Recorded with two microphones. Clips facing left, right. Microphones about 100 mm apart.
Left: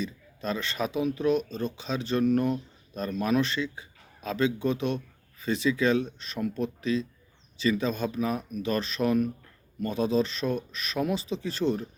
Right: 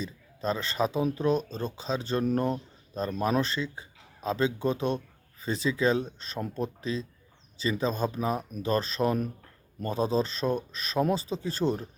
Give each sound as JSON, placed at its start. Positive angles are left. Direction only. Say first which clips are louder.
{"t": 0.0, "sound": "speech", "louder": "right 1 dB", "side_deg": -30}